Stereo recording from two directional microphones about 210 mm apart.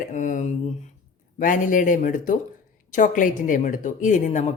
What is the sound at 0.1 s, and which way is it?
A woman's voice, 35° left (ahead or behind).